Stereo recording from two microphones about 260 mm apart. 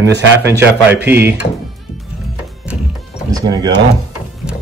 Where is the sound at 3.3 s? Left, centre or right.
Centre.